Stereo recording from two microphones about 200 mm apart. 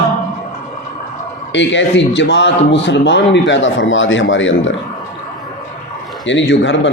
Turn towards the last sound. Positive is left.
turn(degrees=65)  # may be behind; listen again after turning